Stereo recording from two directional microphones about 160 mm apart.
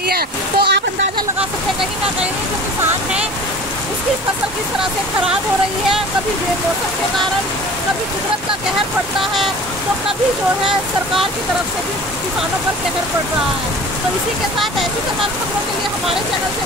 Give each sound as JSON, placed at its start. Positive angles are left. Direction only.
{"t": 0.1, "sound": "speech", "side_deg": -80}
{"t": 9.2, "sound": "speech", "side_deg": 0}